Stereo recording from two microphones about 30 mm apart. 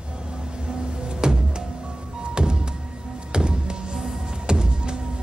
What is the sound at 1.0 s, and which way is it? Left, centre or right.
Music, right.